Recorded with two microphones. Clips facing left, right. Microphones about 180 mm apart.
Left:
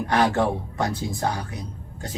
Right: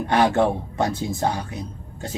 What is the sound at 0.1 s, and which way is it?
Speech, 25° right (ahead or behind).